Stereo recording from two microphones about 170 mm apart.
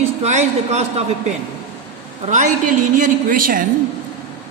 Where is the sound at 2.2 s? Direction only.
45° right (ahead or behind).